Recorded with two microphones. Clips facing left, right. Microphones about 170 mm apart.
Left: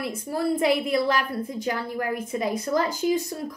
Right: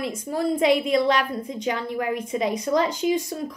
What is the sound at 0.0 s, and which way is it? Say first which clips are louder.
A woman's voice: right 1 dB; 20° right (ahead or behind).